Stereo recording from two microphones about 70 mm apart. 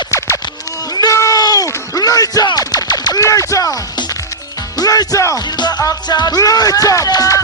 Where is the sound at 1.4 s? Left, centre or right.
Left.